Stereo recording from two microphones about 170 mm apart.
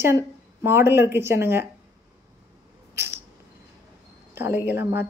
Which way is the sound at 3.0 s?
15° right (ahead or behind).